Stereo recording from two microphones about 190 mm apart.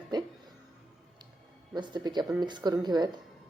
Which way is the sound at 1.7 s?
25° right (ahead or behind).